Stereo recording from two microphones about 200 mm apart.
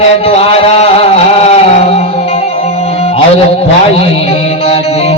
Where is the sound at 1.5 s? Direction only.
30° left (ahead or behind).